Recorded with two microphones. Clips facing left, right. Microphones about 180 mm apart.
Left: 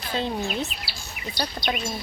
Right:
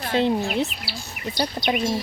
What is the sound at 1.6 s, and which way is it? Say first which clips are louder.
Speech: right 3 dB; 20° right (ahead or behind).